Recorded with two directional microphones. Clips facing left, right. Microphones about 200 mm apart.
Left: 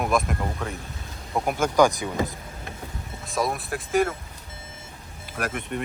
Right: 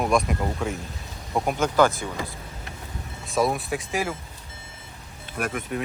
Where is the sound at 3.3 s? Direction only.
Centre (ahead or behind).